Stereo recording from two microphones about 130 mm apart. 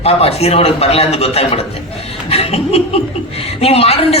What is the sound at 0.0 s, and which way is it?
A man's voice, 50° left (ahead or behind).